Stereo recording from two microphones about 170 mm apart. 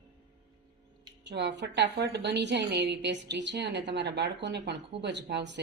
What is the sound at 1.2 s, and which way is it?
A woman's voice, 85° right.